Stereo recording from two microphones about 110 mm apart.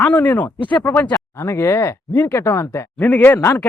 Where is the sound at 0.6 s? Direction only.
45° left (ahead or behind).